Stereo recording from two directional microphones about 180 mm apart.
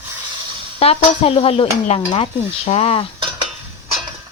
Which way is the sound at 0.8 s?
35° left (ahead or behind).